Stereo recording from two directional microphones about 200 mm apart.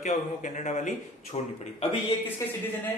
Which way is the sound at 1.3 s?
25° left (ahead or behind).